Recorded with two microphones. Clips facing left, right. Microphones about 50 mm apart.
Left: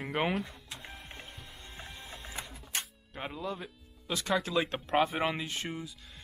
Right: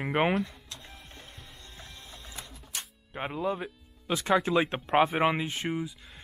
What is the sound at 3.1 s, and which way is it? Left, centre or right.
Speech, right.